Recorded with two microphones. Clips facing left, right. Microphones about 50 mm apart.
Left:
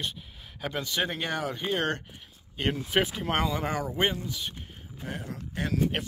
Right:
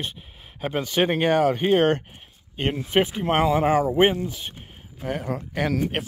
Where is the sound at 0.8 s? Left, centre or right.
Right.